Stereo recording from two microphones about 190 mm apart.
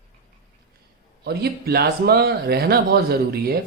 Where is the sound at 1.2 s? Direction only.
55° right (ahead or behind).